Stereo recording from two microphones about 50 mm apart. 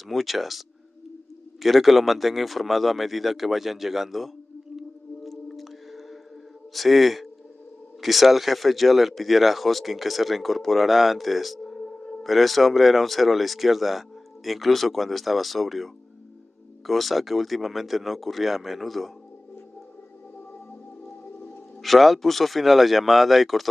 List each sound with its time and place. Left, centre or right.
0.1 s speech: centre
4.7 s whale vocalization: centre
6.7 s speech: centre
11.8 s music: centre
12.2 s speech: centre
21.8 s speech: centre